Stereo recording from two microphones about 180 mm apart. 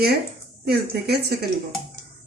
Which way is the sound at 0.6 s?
60° right (ahead or behind).